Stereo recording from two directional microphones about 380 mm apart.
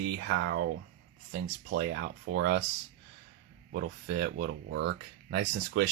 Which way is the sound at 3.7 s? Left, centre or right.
Right.